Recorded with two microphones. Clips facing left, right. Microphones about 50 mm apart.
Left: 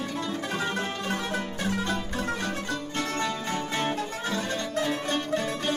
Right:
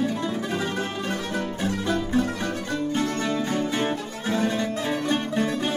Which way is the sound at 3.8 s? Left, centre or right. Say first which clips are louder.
Right 2 dB; centre.